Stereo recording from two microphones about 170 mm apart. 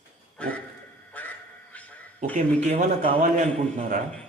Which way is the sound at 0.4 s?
5° left (ahead or behind).